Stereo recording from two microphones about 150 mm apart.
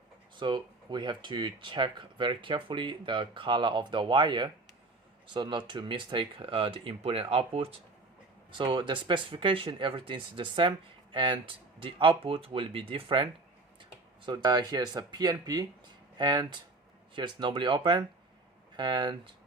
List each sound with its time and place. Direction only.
0.3 s speech: 30° right (ahead or behind)
14.3 s speech: 25° right (ahead or behind)